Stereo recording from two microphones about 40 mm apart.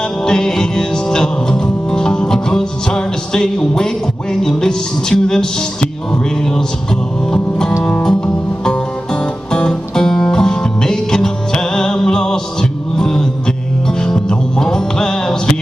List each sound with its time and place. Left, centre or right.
0.2 s music: centre